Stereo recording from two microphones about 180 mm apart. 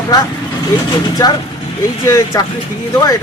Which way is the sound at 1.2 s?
20° left (ahead or behind).